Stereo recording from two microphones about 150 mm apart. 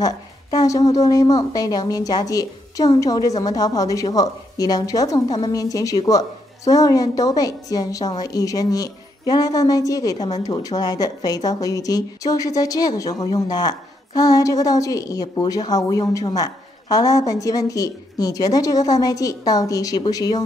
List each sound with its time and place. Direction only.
0.0 s a woman's voice: 25° left (ahead or behind)